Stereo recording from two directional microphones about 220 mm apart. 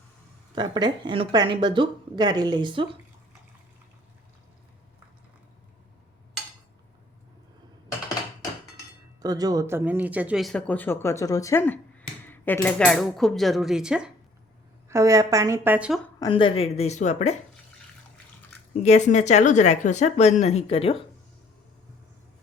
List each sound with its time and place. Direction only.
0.5 s speech: 20° right (ahead or behind)
9.2 s speech: 15° right (ahead or behind)
14.8 s a woman's voice: 15° right (ahead or behind)
16.2 s a woman's voice: 25° left (ahead or behind)
18.7 s speech: 30° left (ahead or behind)